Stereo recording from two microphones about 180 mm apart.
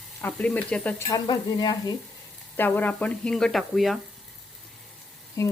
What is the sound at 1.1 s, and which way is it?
Stir, 25° left (ahead or behind).